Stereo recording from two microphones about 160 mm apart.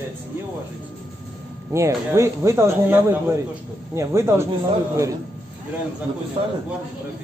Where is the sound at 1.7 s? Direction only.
20° right (ahead or behind).